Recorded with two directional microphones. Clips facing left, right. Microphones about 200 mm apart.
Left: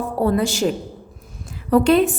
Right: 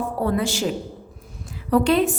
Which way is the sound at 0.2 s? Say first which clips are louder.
Left 5 dB; 40° left (ahead or behind).